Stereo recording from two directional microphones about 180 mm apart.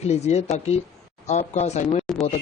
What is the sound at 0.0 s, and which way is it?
Speech, 40° left (ahead or behind).